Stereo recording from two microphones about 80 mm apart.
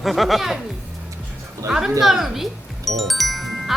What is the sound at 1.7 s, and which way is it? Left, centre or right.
A woman's voice, centre.